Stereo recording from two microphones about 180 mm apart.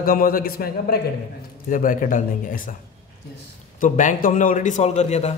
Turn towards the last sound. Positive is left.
turn(degrees=35)  # may be behind; listen again after turning